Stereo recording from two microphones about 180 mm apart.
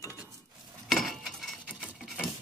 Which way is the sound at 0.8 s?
Centre (ahead or behind).